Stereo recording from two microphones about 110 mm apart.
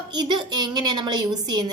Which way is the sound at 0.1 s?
40° right (ahead or behind).